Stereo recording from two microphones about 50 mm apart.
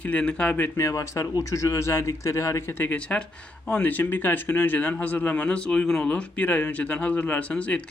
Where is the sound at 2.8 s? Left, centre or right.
Left.